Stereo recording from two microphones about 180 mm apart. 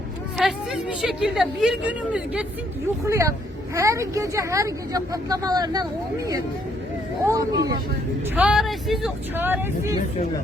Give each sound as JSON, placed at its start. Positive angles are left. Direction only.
{"t": 0.3, "sound": "speech", "side_deg": 0}
{"t": 3.0, "sound": "speech", "side_deg": -15}
{"t": 7.3, "sound": "speech", "side_deg": -20}
{"t": 8.4, "sound": "speech", "side_deg": -5}